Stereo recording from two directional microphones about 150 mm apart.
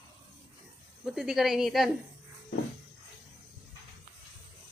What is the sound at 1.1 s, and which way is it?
Speech, centre (ahead or behind).